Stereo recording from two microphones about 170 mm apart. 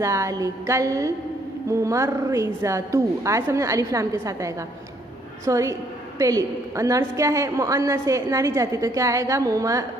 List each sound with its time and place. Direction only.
0.0 s a woman's voice: 15° right (ahead or behind)